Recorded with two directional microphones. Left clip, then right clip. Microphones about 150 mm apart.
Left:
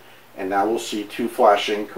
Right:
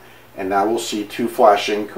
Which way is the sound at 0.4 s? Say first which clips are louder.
Right 3 dB; 10° right (ahead or behind).